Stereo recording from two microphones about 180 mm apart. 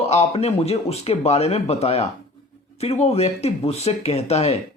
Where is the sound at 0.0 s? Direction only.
35° left (ahead or behind).